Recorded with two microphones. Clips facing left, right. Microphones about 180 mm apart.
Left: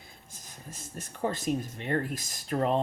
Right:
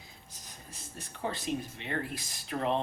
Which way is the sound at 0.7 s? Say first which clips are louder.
Left 5 dB; 45° left (ahead or behind).